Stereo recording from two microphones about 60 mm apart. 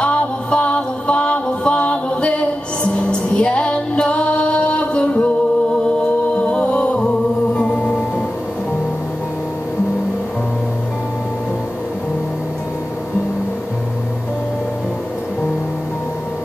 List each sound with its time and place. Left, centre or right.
0.0 s music: centre
6.3 s a sound: left
7.5 s music: centre